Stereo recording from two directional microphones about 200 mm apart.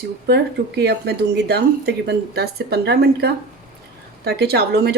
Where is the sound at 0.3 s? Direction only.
55° right (ahead or behind).